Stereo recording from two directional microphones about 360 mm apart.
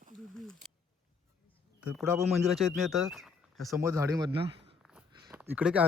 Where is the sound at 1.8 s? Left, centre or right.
Centre.